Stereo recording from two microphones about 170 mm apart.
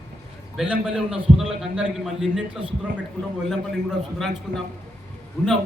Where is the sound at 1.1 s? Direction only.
35° right (ahead or behind).